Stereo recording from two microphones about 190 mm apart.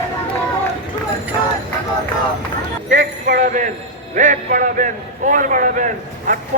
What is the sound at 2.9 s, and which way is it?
A man's voice, 45° right (ahead or behind).